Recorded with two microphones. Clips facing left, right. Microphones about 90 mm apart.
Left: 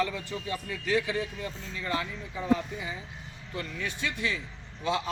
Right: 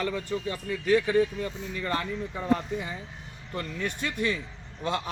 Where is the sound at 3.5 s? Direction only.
50° right (ahead or behind).